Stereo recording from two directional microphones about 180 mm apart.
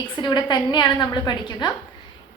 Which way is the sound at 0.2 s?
25° left (ahead or behind).